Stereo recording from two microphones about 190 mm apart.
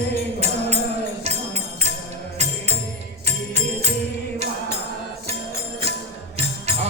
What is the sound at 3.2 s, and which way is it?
Music, 35° right (ahead or behind).